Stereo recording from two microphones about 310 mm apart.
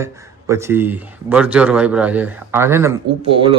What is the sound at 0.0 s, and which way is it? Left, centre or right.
Speech, centre.